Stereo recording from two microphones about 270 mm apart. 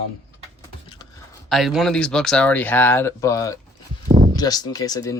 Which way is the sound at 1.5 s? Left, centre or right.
Centre.